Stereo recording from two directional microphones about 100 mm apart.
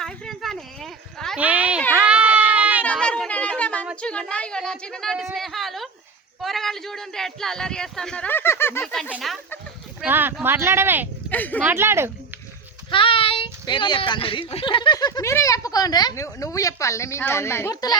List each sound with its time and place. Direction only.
0.0 s speech: 5° left (ahead or behind)
1.4 s a sound: 15° right (ahead or behind)
2.8 s a sound: 10° left (ahead or behind)
4.0 s speech: 10° left (ahead or behind)
8.8 s speech: 5° left (ahead or behind)
10.1 s speech: 20° right (ahead or behind)
11.3 s speech: 15° left (ahead or behind)
11.6 s speech: 25° right (ahead or behind)
12.9 s child singing: 60° left (ahead or behind)
13.7 s speech: 50° left (ahead or behind)
14.9 s speech: 45° left (ahead or behind)
15.2 s speech: 30° left (ahead or behind)
16.1 s speech: 30° left (ahead or behind)
17.7 s speech: 40° left (ahead or behind)